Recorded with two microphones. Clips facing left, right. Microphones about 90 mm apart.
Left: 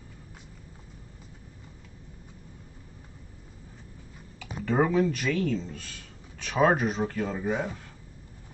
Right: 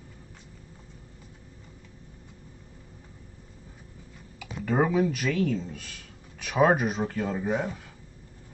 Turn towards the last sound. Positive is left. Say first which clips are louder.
# right 1 dB
turn(degrees=0)  # may be behind; listen again after turning